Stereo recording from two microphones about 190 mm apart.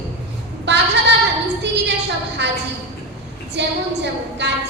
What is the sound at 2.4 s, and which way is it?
A woman's voice, 65° right (ahead or behind).